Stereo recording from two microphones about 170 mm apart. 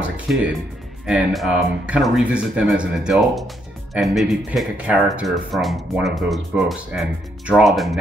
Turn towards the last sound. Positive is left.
turn(degrees=0)  # may be behind; listen again after turning